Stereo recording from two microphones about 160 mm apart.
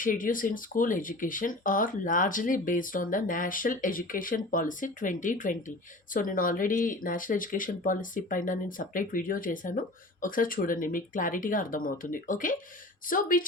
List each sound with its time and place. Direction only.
0.0 s speech: 60° left (ahead or behind)